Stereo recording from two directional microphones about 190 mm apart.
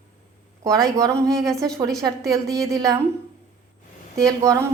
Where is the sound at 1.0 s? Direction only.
15° right (ahead or behind).